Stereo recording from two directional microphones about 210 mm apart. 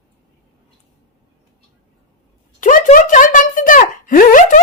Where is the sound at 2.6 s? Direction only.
40° left (ahead or behind).